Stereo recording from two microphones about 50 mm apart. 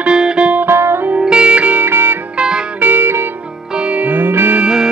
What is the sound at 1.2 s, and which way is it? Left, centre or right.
Music, centre.